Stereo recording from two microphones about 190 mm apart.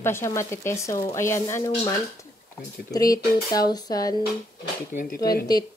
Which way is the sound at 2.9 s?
20° left (ahead or behind).